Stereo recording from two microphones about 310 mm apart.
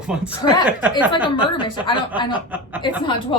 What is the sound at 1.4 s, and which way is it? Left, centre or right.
Speech, centre.